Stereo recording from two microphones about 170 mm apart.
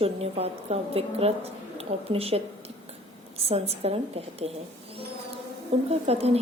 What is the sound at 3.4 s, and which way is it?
A woman's voice, 35° right (ahead or behind).